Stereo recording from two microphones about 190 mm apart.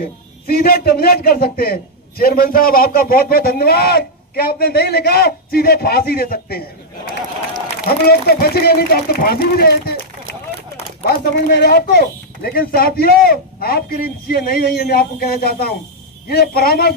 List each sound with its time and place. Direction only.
0.4 s a man's voice: 55° left (ahead or behind)
7.9 s a man's voice: 55° left (ahead or behind)
11.0 s a man's voice: 55° left (ahead or behind)